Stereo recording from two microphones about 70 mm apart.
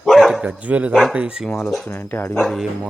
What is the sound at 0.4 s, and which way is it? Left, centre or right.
Speech, right.